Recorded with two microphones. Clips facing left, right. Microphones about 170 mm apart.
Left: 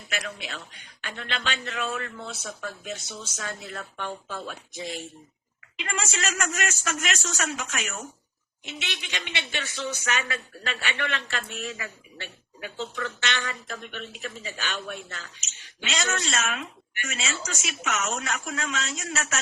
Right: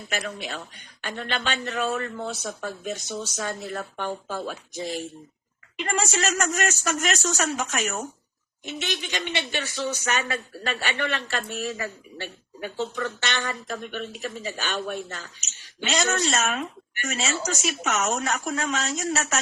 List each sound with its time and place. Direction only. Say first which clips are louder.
0.1 s speech: right 3 dB; 40° right (ahead or behind)